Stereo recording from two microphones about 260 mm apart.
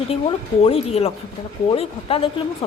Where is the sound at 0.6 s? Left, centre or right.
Left.